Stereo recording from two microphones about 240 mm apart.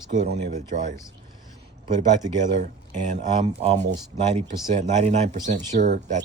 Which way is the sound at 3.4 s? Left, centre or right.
Right.